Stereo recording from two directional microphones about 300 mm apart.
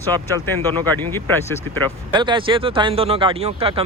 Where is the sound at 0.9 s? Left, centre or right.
Centre.